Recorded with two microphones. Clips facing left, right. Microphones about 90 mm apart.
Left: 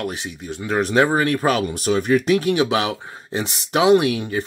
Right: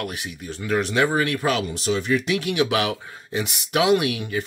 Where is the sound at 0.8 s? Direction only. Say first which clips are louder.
Left 5 dB; 40° left (ahead or behind).